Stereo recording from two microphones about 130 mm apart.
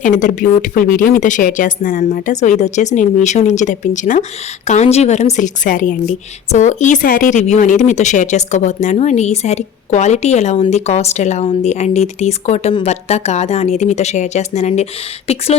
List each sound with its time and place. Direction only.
0.0 s a woman's voice: 75° left (ahead or behind)
6.5 s speech: 70° left (ahead or behind)
15.3 s speech: 50° left (ahead or behind)